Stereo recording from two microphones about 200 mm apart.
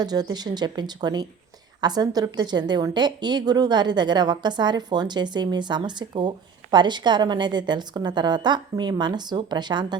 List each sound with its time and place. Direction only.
0.0 s a woman's voice: 20° right (ahead or behind)